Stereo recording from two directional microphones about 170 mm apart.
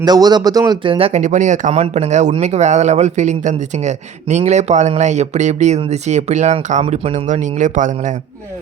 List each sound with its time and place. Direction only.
0.0 s speech: 25° right (ahead or behind); by 8.1 s 45° right (ahead or behind)